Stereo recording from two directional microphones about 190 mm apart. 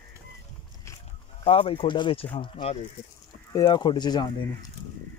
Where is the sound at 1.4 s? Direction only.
30° left (ahead or behind).